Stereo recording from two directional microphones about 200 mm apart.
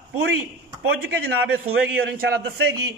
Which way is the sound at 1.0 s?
55° right (ahead or behind).